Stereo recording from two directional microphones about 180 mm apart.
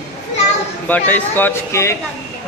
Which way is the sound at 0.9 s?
10° left (ahead or behind).